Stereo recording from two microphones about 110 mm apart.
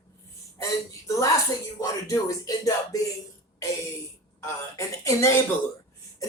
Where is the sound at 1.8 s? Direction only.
30° left (ahead or behind).